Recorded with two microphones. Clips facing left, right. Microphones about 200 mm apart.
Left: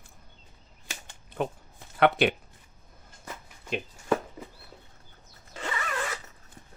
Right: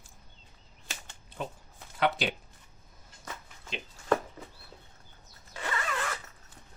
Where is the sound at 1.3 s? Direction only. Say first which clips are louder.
Left 7 dB; 60° left (ahead or behind).